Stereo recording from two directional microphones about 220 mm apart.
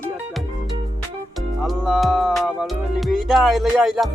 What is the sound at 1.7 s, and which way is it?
Speech, centre (ahead or behind).